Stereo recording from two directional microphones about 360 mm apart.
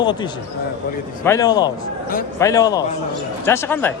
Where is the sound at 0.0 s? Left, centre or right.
Centre.